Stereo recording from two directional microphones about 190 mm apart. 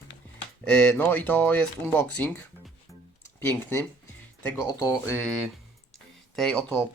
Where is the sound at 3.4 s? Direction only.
10° left (ahead or behind).